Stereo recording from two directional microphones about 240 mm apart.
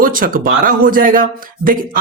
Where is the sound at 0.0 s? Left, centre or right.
Right.